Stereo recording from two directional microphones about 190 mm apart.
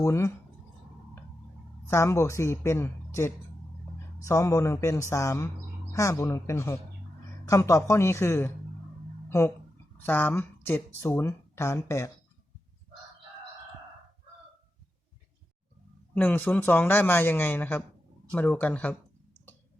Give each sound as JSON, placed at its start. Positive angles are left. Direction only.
{"t": 0.0, "sound": "speech", "side_deg": 15}
{"t": 1.9, "sound": "speech", "side_deg": 15}
{"t": 10.0, "sound": "speech", "side_deg": 10}
{"t": 16.1, "sound": "speech", "side_deg": 10}